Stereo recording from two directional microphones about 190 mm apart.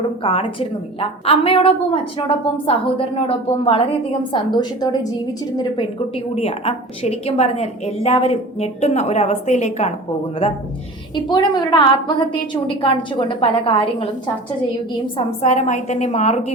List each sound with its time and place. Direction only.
0.2 s a woman's voice: 30° left (ahead or behind)
15.0 s a woman's voice: 40° left (ahead or behind)